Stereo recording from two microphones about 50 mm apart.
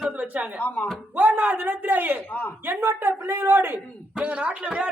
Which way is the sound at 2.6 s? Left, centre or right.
Right.